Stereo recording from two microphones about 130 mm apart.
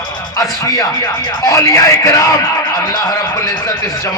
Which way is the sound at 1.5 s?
25° left (ahead or behind).